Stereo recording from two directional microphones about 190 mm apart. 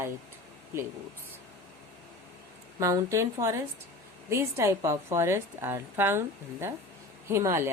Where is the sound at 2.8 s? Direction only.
15° right (ahead or behind).